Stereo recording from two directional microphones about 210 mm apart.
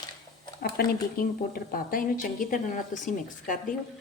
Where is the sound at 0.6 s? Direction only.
45° left (ahead or behind).